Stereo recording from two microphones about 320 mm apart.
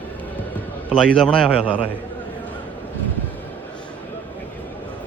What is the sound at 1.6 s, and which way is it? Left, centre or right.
Speech, centre.